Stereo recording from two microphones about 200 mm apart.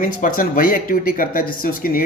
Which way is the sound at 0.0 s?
45° left (ahead or behind).